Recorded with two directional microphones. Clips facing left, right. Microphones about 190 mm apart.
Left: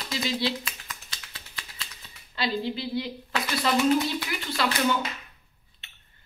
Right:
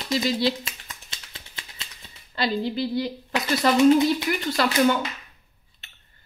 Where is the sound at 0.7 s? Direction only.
25° right (ahead or behind).